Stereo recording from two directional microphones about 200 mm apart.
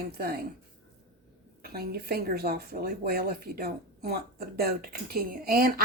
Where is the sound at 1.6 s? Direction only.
50° right (ahead or behind).